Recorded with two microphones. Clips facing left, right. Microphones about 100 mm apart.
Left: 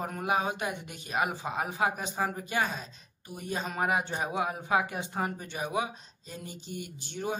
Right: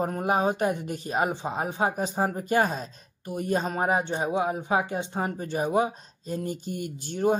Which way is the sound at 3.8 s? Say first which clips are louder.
Right 4 dB; 30° right (ahead or behind).